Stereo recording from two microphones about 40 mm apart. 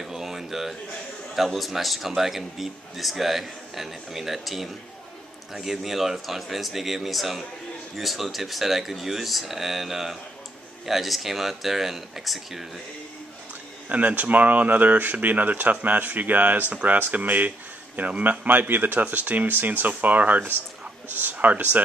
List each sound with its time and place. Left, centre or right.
0.0 s a sound: centre
1.3 s a man's voice: centre
13.8 s speech: right